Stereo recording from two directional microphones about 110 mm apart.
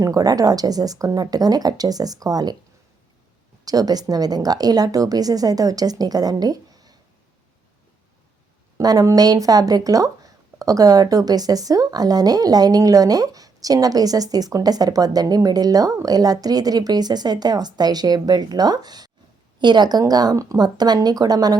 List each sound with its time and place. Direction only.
0.0 s speech: 35° right (ahead or behind)
3.6 s speech: 35° right (ahead or behind)
8.8 s speech: 35° right (ahead or behind)